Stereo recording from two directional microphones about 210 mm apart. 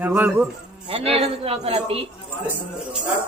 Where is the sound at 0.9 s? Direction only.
25° right (ahead or behind).